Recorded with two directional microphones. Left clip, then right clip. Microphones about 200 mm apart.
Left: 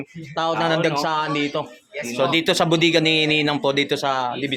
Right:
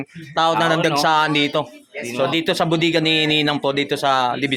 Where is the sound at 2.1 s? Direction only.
Centre (ahead or behind).